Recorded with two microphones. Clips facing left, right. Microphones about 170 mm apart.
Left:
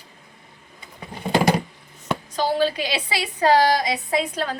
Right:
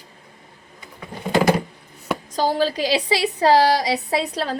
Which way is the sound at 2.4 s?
40° right (ahead or behind).